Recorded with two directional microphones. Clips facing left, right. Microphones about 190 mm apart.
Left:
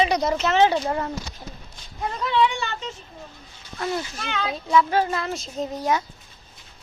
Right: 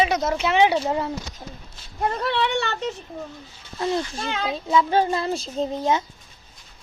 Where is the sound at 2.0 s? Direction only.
50° right (ahead or behind); by 2.9 s 70° right (ahead or behind).